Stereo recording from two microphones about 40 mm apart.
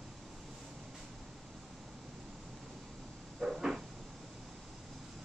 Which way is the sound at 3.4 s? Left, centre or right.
Centre.